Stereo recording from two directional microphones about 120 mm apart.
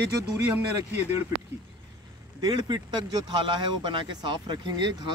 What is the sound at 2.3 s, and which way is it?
Speech, 35° right (ahead or behind).